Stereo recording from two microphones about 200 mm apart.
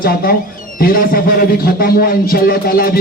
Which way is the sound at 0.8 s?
45° left (ahead or behind).